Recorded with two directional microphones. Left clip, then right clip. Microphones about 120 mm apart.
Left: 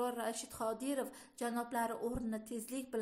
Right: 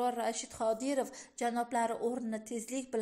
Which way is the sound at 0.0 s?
25° right (ahead or behind).